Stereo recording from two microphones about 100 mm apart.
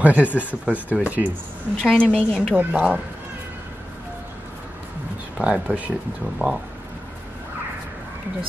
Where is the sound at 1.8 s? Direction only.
5° left (ahead or behind).